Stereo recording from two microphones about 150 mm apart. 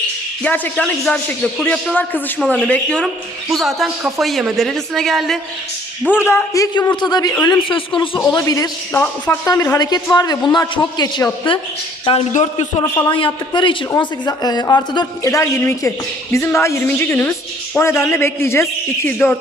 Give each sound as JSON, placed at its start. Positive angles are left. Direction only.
{"t": 0.4, "sound": "a man's voice", "side_deg": 10}
{"t": 6.1, "sound": "a woman's voice", "side_deg": 15}
{"t": 8.2, "sound": "a woman's voice", "side_deg": 20}
{"t": 8.9, "sound": "a man's voice", "side_deg": 10}
{"t": 9.5, "sound": "a woman's voice", "side_deg": 20}
{"t": 12.3, "sound": "a man's voice", "side_deg": 50}
{"t": 13.1, "sound": "a woman's voice", "side_deg": 35}